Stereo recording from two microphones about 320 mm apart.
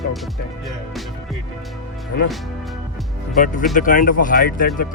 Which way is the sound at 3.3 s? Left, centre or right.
Left.